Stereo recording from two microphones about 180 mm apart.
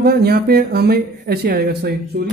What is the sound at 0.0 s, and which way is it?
Speech, 60° right (ahead or behind).